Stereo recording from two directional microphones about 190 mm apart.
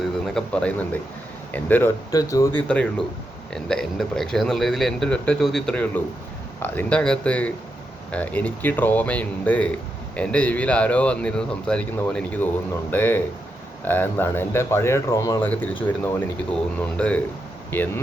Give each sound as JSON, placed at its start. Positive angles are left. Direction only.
{"t": 0.3, "sound": "speech", "side_deg": 5}